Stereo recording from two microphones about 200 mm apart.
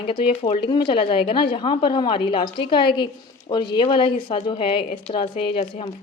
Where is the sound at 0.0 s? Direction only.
25° left (ahead or behind).